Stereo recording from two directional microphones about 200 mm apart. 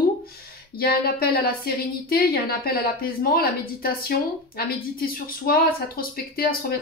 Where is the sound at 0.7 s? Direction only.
50° left (ahead or behind).